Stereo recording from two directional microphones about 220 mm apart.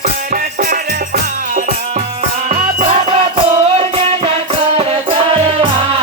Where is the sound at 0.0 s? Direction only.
40° right (ahead or behind).